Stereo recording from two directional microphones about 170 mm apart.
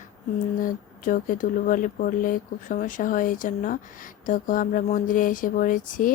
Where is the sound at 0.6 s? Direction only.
50° left (ahead or behind).